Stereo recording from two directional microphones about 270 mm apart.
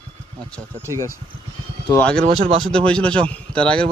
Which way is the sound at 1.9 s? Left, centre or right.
Centre.